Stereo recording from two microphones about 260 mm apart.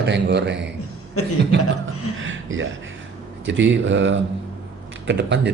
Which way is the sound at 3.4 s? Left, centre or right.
Right.